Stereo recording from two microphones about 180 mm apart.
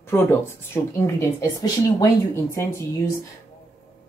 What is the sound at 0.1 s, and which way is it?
Speech, 15° left (ahead or behind).